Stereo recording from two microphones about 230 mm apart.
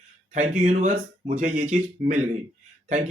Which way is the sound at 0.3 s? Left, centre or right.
Right.